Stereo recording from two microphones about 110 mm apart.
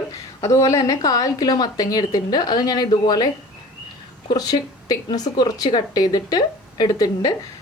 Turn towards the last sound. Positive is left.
turn(degrees=35)  # may be behind; listen again after turning